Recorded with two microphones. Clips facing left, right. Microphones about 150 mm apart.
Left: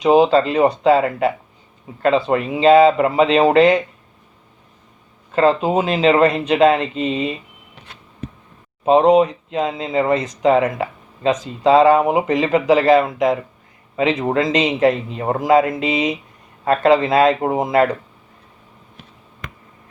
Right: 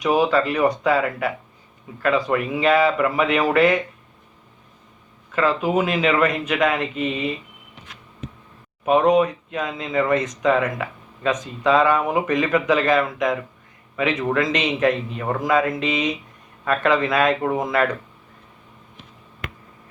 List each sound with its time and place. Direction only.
0.0 s speech: 25° left (ahead or behind)
5.3 s a man's voice: 30° left (ahead or behind)
8.8 s speech: 25° left (ahead or behind)